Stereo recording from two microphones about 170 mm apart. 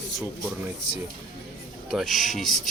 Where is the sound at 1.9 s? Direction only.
Centre (ahead or behind).